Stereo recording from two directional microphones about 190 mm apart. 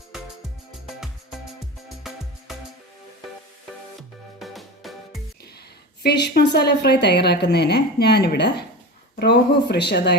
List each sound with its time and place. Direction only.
0.1 s music: centre (ahead or behind)
4.4 s music: centre (ahead or behind)
6.0 s a woman's voice: 60° left (ahead or behind)